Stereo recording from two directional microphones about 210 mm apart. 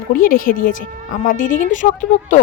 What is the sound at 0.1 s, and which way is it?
Speech, 40° left (ahead or behind).